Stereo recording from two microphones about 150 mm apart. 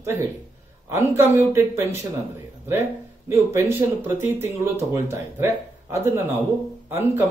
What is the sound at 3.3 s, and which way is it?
Speech, 15° right (ahead or behind).